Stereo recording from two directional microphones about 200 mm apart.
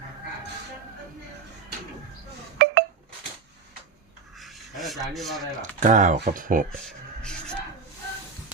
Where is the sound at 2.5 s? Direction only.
60° right (ahead or behind).